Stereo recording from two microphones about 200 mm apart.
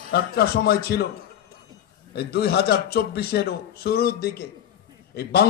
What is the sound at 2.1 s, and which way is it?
Speech, 55° left (ahead or behind).